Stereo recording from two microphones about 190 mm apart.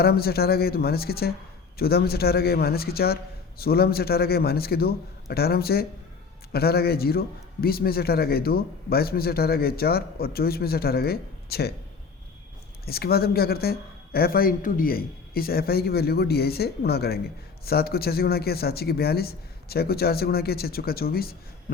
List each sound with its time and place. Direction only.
0.0 s a man's voice: 55° left (ahead or behind)
12.8 s a man's voice: 55° left (ahead or behind)